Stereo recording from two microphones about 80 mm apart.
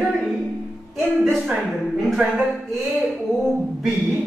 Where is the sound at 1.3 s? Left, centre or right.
Centre.